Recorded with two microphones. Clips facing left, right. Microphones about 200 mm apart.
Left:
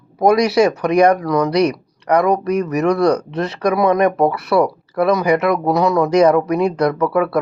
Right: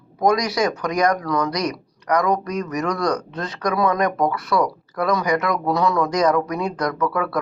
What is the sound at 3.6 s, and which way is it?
Speech, 25° left (ahead or behind).